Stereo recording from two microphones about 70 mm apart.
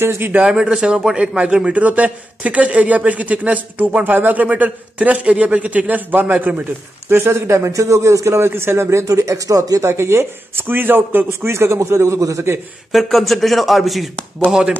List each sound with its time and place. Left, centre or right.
0.0 s speech: right
0.4 s a man's voice: centre; by 6.5 s right
7.1 s speech: right
11.4 s speech: right
12.9 s speech: centre